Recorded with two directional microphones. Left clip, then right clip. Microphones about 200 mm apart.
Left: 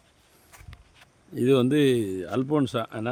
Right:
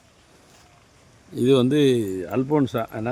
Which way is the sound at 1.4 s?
35° left (ahead or behind).